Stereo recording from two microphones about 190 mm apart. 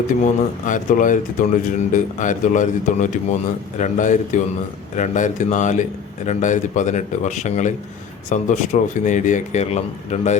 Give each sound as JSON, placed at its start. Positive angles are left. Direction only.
{"t": 0.6, "sound": "speech", "side_deg": 45}